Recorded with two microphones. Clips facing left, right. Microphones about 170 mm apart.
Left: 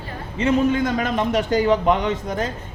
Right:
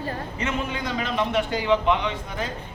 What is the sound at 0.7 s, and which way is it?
A man's voice, 45° left (ahead or behind).